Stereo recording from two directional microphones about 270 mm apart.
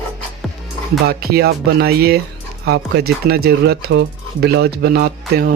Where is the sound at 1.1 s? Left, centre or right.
Right.